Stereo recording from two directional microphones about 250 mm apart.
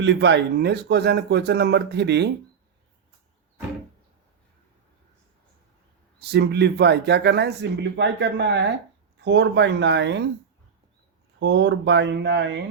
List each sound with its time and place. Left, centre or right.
0.0 s speech: right
6.1 s speech: right
11.3 s speech: right